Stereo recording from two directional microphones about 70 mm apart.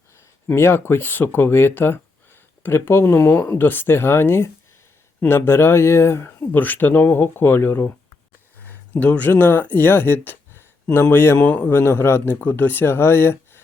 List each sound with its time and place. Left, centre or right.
0.4 s speech: left
6.5 s speech: left